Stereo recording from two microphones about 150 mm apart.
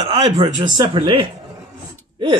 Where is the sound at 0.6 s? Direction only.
35° right (ahead or behind).